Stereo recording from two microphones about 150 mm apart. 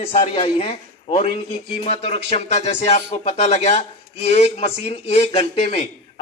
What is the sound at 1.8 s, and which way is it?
A man's voice, 45° left (ahead or behind).